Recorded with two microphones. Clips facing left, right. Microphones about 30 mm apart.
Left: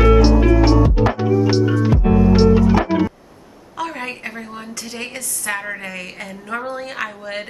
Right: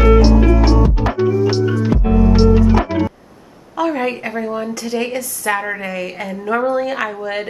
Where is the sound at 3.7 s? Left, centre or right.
Centre.